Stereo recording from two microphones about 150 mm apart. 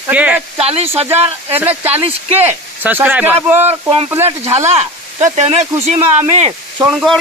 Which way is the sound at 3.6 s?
40° right (ahead or behind).